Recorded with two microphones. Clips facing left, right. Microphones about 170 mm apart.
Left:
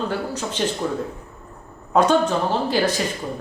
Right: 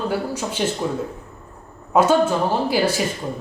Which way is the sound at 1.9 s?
5° right (ahead or behind).